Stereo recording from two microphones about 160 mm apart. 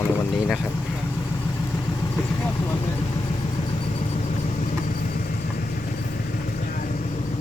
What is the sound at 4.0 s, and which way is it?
Vehicle, 45° left (ahead or behind).